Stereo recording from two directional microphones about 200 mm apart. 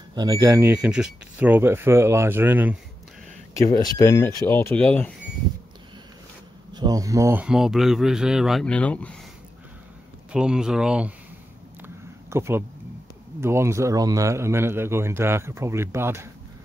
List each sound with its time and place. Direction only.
0.1 s a man's voice: 20° right (ahead or behind)
3.5 s speech: 15° left (ahead or behind)
6.7 s speech: 20° right (ahead or behind); by 9.1 s 5° left (ahead or behind)
10.3 s speech: 5° right (ahead or behind)
11.8 s a sound: 15° right (ahead or behind)
13.4 s a man's voice: 15° right (ahead or behind)